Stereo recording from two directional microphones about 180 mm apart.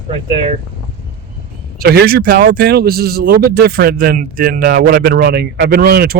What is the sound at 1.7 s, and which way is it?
Speech, 60° right (ahead or behind).